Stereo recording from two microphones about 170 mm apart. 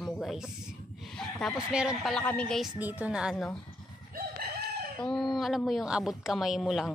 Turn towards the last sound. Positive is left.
turn(degrees=0)  # may be behind; listen again after turning